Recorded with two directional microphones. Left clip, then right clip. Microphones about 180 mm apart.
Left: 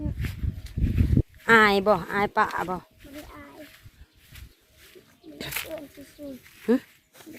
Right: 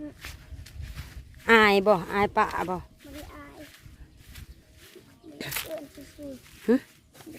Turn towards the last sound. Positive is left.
turn(degrees=-20)  # may be behind; listen again after turning